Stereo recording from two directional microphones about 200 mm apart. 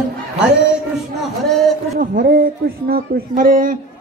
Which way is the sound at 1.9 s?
45° right (ahead or behind).